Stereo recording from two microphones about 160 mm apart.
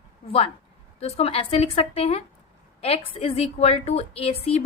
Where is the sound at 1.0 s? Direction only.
40° left (ahead or behind).